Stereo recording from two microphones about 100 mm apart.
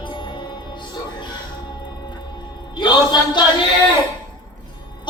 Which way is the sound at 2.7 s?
50° left (ahead or behind).